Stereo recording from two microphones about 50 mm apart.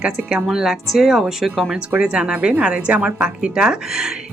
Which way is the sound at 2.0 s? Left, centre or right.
Centre.